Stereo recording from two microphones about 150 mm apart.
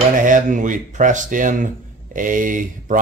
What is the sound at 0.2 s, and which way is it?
Speech, 60° right (ahead or behind).